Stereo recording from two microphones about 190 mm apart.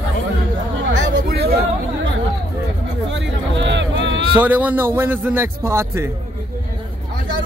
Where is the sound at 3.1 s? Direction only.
70° right (ahead or behind).